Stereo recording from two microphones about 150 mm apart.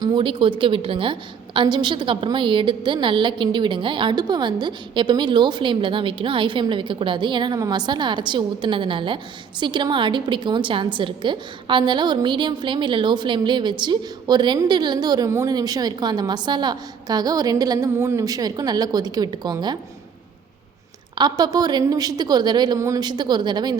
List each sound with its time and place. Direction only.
0.0 s a woman's voice: 30° right (ahead or behind)
21.2 s a woman's voice: 30° right (ahead or behind)